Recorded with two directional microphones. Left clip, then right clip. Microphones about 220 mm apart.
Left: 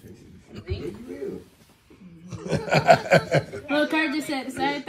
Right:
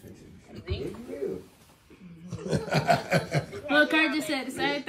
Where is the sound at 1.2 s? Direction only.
35° right (ahead or behind).